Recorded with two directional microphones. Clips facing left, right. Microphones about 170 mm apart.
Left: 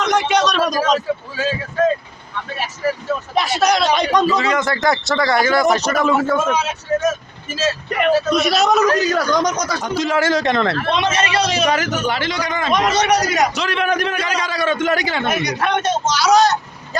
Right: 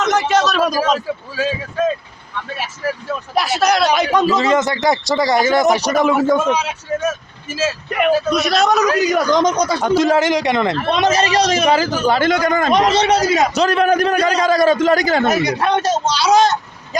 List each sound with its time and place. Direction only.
0.0 s a man's voice: centre (ahead or behind)
3.3 s speech: 5° right (ahead or behind)
4.4 s a man's voice: 25° right (ahead or behind)
7.6 s speech: 5° right (ahead or behind)
9.0 s speech: 15° right (ahead or behind)
9.8 s a man's voice: 50° right (ahead or behind)
10.2 s a man's voice: 15° right (ahead or behind)
10.9 s a man's voice: 40° right (ahead or behind)
11.6 s a man's voice: 30° right (ahead or behind)
12.2 s a man's voice: 50° right (ahead or behind)
12.7 s speech: 30° right (ahead or behind)
13.5 s a man's voice: 40° right (ahead or behind); by 17.0 s 25° right (ahead or behind)